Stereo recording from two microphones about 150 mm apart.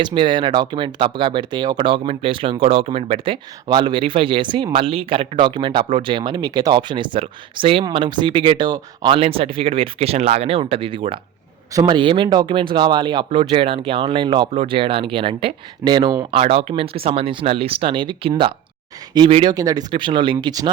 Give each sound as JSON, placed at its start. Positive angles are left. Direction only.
{"t": 0.0, "sound": "speech", "side_deg": -35}
{"t": 16.3, "sound": "speech", "side_deg": -40}
{"t": 19.5, "sound": "speech", "side_deg": -25}